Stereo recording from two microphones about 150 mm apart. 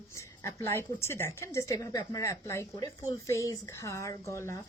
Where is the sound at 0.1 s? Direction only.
20° left (ahead or behind).